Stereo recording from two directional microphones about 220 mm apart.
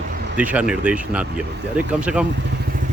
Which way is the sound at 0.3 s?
5° right (ahead or behind).